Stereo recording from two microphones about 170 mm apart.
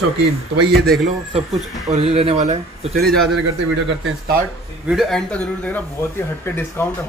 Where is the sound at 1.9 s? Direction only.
35° right (ahead or behind).